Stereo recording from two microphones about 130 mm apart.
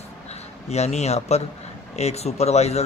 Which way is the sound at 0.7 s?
60° left (ahead or behind).